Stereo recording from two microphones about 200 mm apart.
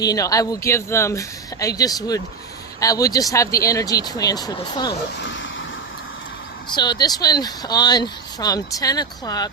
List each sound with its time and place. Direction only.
0.0 s speech: 20° left (ahead or behind)
5.2 s vehicle: 70° left (ahead or behind)
6.7 s speech: 20° left (ahead or behind)